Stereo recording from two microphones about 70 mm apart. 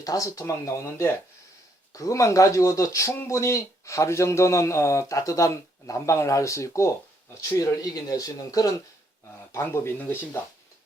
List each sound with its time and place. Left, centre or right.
0.0 s speech: left
1.9 s speech: left
7.6 s speech: left
9.5 s speech: left